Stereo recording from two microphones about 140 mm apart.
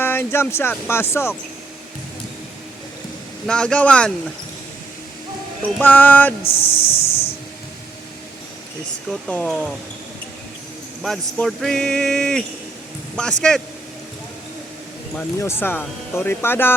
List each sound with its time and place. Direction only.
0.0 s speech: 15° left (ahead or behind)
3.4 s speech: 5° left (ahead or behind)
5.8 s speech: 15° left (ahead or behind)
6.4 s hiss: 45° left (ahead or behind)
9.3 s speech: 5° left (ahead or behind)
11.0 s speech: centre (ahead or behind)
15.4 s speech: 15° left (ahead or behind)